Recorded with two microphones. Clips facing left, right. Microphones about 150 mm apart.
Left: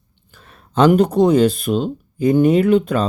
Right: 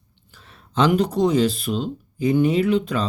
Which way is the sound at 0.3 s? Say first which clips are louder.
Left 5 dB; 50° left (ahead or behind).